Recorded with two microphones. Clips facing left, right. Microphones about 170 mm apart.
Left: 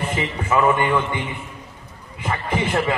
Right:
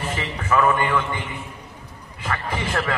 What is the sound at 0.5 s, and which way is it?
Speech, 15° left (ahead or behind).